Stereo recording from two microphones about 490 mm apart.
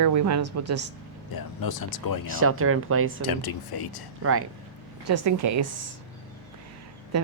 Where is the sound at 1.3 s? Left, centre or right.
Left.